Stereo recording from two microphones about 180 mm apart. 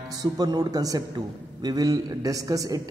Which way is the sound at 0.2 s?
20° right (ahead or behind).